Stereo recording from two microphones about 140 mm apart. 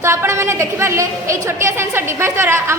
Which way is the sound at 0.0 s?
20° right (ahead or behind).